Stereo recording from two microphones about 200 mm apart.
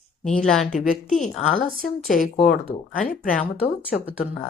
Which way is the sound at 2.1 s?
35° left (ahead or behind).